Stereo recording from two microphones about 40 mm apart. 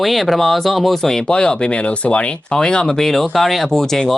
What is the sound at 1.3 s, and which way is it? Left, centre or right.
Speech, left.